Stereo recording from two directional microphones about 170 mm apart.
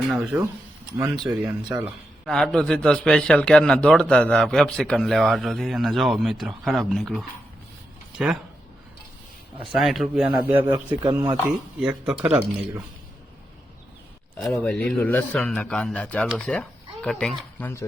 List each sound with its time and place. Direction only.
0.1 s a man's voice: 5° right (ahead or behind)
1.6 s speech: 15° right (ahead or behind)
2.2 s a man's voice: 5° left (ahead or behind)
9.7 s speech: centre (ahead or behind)
14.3 s a man's voice: 5° left (ahead or behind)